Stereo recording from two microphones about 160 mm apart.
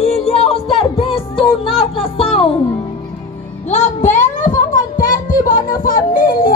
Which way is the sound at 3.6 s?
45° left (ahead or behind).